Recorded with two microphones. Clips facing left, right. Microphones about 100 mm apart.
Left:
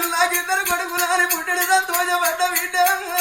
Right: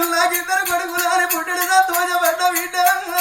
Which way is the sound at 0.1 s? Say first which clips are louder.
Right 2 dB; 25° right (ahead or behind).